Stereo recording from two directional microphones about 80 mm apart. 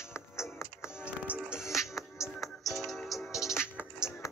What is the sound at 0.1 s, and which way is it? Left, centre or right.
Music, left.